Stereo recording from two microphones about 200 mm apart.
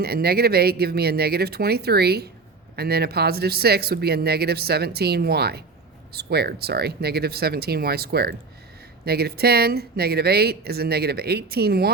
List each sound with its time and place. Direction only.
0.0 s speech: 50° right (ahead or behind)